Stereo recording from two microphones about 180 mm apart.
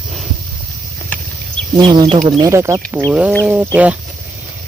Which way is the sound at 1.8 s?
25° right (ahead or behind).